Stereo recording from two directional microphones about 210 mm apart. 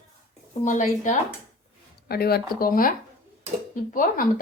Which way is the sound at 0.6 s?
35° left (ahead or behind).